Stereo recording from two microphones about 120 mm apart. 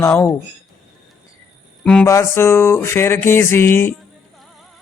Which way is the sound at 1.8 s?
10° left (ahead or behind).